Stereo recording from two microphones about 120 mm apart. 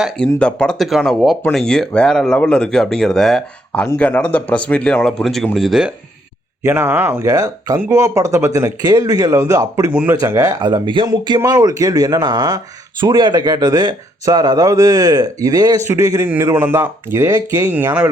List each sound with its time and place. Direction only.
0.3 s speech: 10° left (ahead or behind)
6.6 s speech: 20° right (ahead or behind)
7.3 s speech: 30° right (ahead or behind)
9.9 s speech: 15° right (ahead or behind)
10.2 s speech: 25° right (ahead or behind)
10.6 s speech: 40° right (ahead or behind); by 18.1 s 15° right (ahead or behind)